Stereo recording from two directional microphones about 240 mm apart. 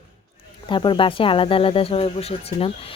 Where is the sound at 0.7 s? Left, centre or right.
Left.